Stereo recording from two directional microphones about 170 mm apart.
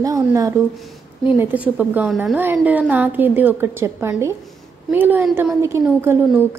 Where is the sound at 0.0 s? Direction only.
20° right (ahead or behind).